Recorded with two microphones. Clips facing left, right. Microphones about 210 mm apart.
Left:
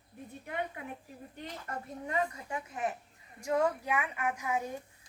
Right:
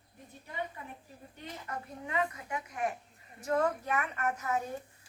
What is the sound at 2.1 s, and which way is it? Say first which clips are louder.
Speech: even; 30° left (ahead or behind).